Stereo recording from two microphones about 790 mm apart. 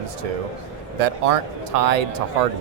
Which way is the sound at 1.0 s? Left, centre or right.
Right.